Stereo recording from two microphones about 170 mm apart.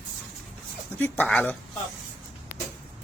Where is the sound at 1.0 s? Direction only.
10° left (ahead or behind).